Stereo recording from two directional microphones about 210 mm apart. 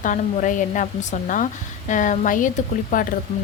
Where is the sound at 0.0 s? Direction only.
35° left (ahead or behind).